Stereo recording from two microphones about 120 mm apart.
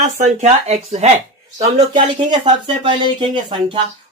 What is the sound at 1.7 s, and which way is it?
Speech, 40° right (ahead or behind).